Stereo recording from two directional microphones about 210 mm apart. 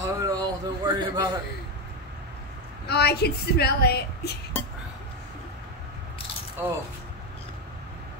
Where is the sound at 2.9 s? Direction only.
50° left (ahead or behind).